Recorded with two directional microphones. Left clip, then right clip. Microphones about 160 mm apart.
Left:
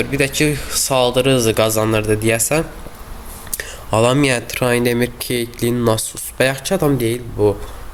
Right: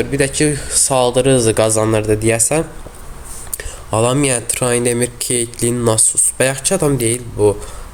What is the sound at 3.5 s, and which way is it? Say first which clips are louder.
Speech: left 1 dB; centre (ahead or behind).